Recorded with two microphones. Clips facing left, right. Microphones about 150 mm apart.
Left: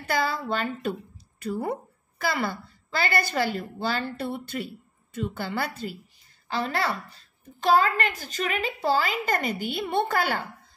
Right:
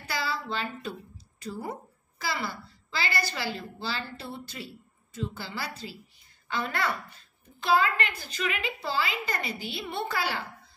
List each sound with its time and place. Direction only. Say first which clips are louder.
0.0 s a woman's voice: left 6 dB; 50° left (ahead or behind)
6.4 s a woman's voice: left 3 dB; 35° left (ahead or behind)